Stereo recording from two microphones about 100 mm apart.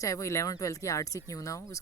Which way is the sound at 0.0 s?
30° left (ahead or behind).